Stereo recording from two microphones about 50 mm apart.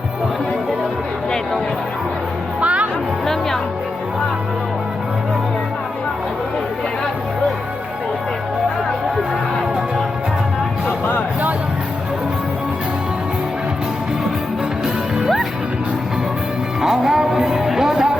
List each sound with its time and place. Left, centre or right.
2.6 s music: right
10.8 s music: left
16.8 s music: centre